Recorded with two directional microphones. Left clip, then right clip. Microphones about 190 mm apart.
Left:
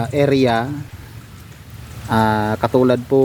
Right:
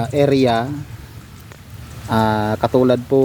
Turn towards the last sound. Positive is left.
turn(degrees=0)  # may be behind; listen again after turning